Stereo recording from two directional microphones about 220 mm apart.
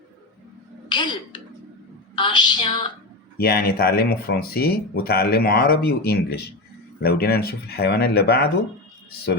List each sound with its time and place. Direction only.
0.9 s speech: 20° left (ahead or behind)
2.1 s a sound: 20° left (ahead or behind)
3.3 s speech: 45° left (ahead or behind)